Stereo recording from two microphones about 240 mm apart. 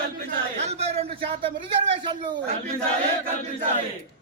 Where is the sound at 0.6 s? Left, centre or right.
Right.